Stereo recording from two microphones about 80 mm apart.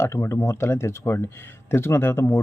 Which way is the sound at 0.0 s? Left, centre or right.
Left.